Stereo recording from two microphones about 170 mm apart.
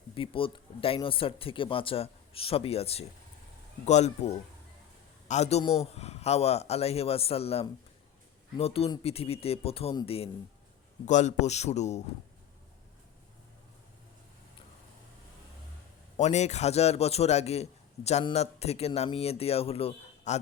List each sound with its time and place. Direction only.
0.1 s a man's voice: 30° left (ahead or behind)
5.3 s a man's voice: 40° left (ahead or behind)
11.0 s speech: 45° left (ahead or behind)
16.1 s a man's voice: 40° left (ahead or behind)